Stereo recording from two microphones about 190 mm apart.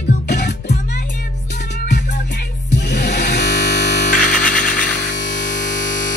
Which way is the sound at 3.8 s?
40° left (ahead or behind).